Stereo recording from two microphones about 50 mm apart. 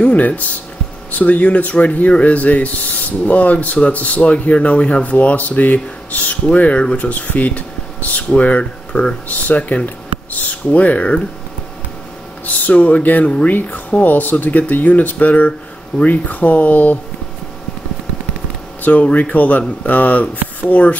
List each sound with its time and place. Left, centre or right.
0.0 s speech: left
7.1 s speech: left
9.8 s speech: left
12.4 s speech: left
18.8 s speech: left